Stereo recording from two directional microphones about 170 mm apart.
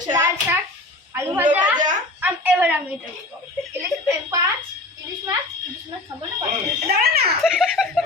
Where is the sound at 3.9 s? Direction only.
Centre (ahead or behind).